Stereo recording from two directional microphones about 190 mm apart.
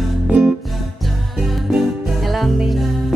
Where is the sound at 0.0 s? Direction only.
Centre (ahead or behind).